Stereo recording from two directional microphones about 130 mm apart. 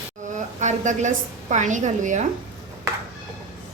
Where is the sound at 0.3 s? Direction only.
70° right (ahead or behind).